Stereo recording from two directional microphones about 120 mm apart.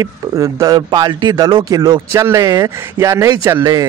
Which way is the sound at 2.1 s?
25° right (ahead or behind).